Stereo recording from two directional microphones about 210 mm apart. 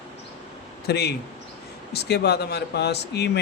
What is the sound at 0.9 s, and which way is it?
Speech, 50° left (ahead or behind).